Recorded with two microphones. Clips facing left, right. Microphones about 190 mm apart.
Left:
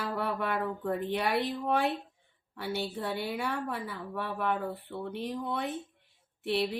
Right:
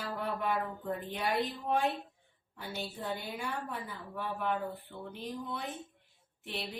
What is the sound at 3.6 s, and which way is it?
Speech, 70° left (ahead or behind).